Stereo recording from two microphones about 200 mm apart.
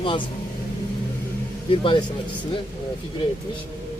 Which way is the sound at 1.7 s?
25° left (ahead or behind).